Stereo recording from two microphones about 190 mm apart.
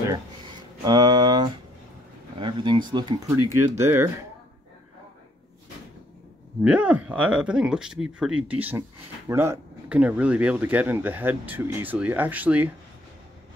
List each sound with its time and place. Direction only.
0.6 s speech: 20° right (ahead or behind)
6.6 s speech: 5° right (ahead or behind)